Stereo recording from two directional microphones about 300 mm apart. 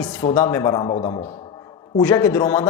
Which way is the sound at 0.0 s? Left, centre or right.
Centre.